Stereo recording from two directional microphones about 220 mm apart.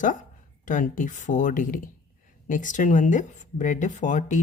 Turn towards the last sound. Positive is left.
turn(degrees=35)  # may be behind; listen again after turning